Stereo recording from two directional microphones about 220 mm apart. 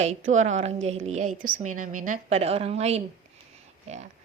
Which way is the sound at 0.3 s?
30° right (ahead or behind).